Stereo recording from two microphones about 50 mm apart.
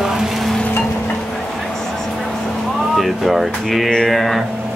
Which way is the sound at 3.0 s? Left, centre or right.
Centre.